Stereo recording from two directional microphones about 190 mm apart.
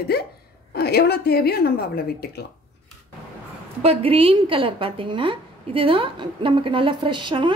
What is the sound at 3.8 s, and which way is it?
A woman's voice, 30° right (ahead or behind).